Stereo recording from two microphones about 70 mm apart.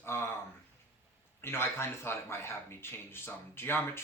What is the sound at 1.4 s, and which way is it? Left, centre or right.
Speech, left.